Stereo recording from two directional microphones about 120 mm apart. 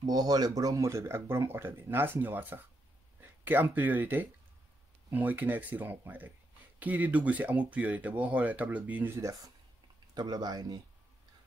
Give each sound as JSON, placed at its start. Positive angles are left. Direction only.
{"t": 0.1, "sound": "speech", "side_deg": -35}
{"t": 10.1, "sound": "speech", "side_deg": -35}